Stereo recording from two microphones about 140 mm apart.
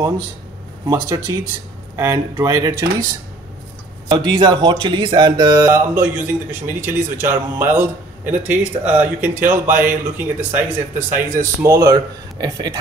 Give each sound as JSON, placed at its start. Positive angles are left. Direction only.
{"t": 0.8, "sound": "speech", "side_deg": -25}
{"t": 4.1, "sound": "speech", "side_deg": -30}